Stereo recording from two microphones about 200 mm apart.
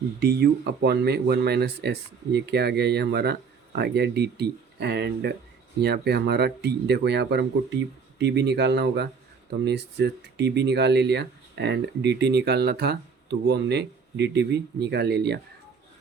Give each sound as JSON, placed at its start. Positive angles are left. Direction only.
{"t": 0.2, "sound": "speech", "side_deg": -50}